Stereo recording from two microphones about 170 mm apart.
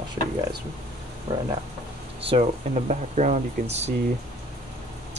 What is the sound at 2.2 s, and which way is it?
Speech, 35° right (ahead or behind).